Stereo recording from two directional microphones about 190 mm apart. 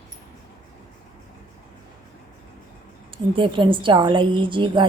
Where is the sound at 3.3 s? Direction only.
25° right (ahead or behind).